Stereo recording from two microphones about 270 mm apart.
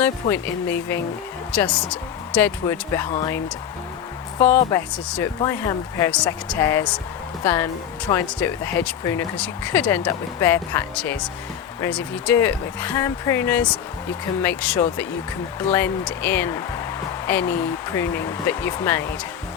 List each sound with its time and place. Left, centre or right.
0.0 s speech: centre
4.4 s speech: centre